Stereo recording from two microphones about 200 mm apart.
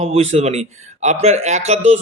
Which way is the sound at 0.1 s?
30° right (ahead or behind).